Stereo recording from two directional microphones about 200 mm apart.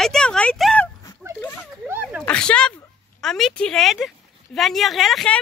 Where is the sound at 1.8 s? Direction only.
10° right (ahead or behind).